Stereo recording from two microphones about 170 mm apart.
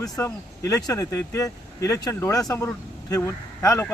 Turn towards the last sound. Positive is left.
turn(degrees=15)  # may be behind; listen again after turning